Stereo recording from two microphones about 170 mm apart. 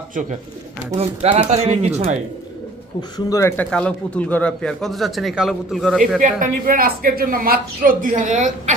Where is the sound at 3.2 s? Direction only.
15° left (ahead or behind).